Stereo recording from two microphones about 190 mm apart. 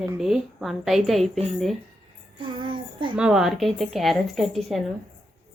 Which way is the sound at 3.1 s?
5° right (ahead or behind).